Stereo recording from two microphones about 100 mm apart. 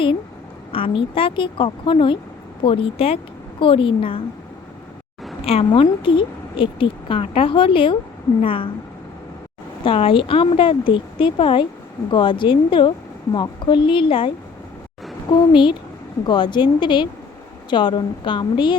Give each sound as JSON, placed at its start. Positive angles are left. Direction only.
{"t": 0.7, "sound": "a woman's voice", "side_deg": 65}
{"t": 5.5, "sound": "a woman's voice", "side_deg": 65}
{"t": 9.8, "sound": "a woman's voice", "side_deg": 65}
{"t": 15.3, "sound": "a woman's voice", "side_deg": 55}